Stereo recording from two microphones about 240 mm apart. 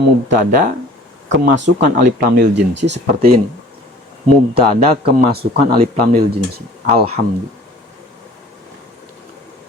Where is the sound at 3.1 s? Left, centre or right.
Right.